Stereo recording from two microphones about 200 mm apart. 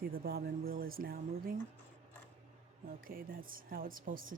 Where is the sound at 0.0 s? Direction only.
50° right (ahead or behind).